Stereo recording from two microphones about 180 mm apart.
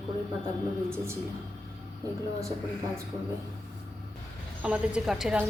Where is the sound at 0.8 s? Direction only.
15° right (ahead or behind).